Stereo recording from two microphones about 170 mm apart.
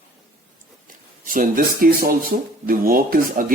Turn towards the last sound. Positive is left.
turn(degrees=-60)  # may be behind; listen again after turning